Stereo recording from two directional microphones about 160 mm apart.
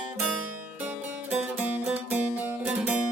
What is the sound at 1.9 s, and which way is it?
Music, 10° right (ahead or behind).